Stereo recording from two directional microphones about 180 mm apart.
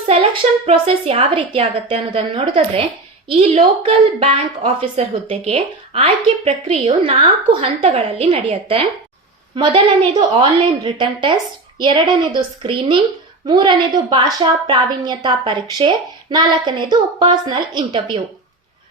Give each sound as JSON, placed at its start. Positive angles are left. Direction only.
{"t": 0.1, "sound": "a woman's voice", "side_deg": -30}